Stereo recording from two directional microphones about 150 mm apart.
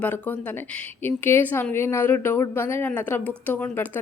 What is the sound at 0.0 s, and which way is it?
A woman's voice, 10° left (ahead or behind).